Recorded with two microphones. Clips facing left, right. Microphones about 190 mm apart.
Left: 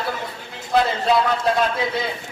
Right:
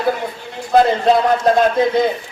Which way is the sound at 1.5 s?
45° right (ahead or behind).